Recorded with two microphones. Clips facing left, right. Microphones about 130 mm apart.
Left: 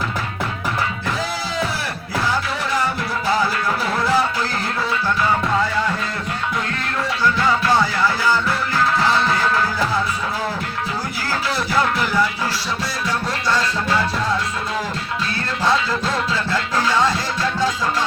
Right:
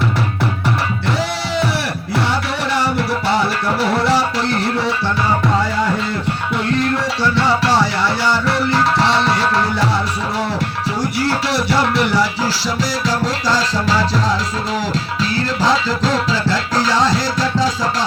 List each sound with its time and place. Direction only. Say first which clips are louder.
2.1 s music: right 2 dB; 75° right (ahead or behind)
7.6 s music: right 2 dB; 75° right (ahead or behind)
11.3 s music: right 2 dB; 75° right (ahead or behind); by 17.2 s 90° right